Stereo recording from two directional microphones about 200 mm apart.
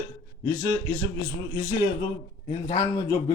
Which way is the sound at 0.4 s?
15° left (ahead or behind).